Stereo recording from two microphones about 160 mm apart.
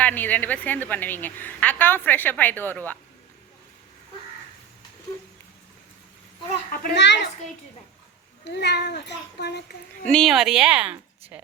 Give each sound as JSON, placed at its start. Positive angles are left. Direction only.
{"t": 0.0, "sound": "a woman's voice", "side_deg": 10}
{"t": 6.7, "sound": "a child's voice", "side_deg": 75}
{"t": 8.4, "sound": "a child's voice", "side_deg": 90}
{"t": 10.1, "sound": "a woman's voice", "side_deg": 0}